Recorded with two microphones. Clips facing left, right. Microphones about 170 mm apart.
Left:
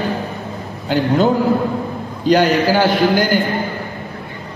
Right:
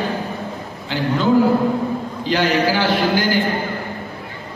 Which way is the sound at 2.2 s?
45° left (ahead or behind).